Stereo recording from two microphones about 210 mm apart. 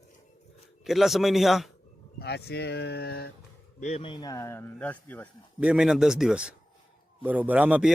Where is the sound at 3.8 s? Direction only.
30° left (ahead or behind); by 5.3 s 5° left (ahead or behind).